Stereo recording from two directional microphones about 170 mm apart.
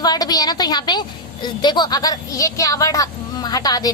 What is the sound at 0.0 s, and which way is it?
A woman's voice, 25° left (ahead or behind).